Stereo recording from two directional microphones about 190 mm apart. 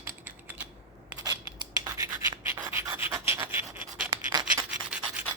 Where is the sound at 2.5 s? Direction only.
10° right (ahead or behind).